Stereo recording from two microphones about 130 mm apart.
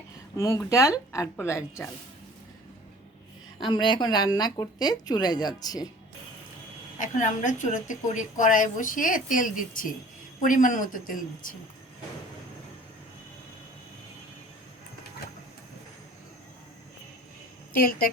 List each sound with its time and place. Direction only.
0.3 s a woman's voice: 25° left (ahead or behind)
3.6 s a woman's voice: 35° left (ahead or behind)
7.0 s a woman's voice: 75° left (ahead or behind); by 11.5 s 90° left